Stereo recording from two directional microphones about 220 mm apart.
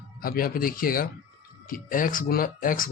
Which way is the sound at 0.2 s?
40° left (ahead or behind).